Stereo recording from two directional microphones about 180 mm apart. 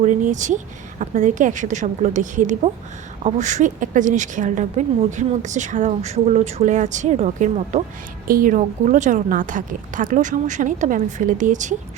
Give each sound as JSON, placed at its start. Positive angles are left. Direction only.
{"t": 0.0, "sound": "a woman's voice", "side_deg": -45}